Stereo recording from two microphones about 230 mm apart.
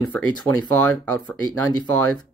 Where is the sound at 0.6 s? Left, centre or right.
Centre.